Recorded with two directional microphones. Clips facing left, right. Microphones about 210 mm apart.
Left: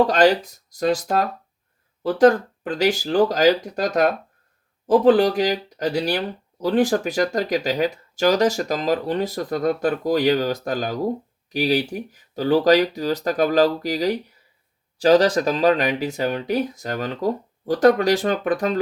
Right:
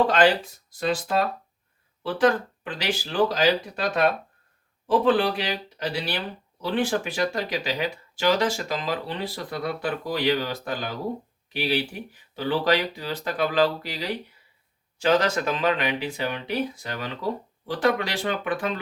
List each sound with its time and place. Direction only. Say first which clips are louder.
0.1 s speech: left 4 dB; 40° left (ahead or behind)